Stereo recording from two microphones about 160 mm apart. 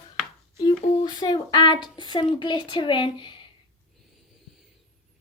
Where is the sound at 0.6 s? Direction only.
25° left (ahead or behind).